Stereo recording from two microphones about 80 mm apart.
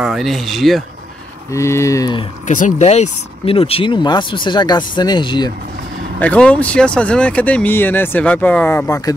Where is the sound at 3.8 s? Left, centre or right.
Left.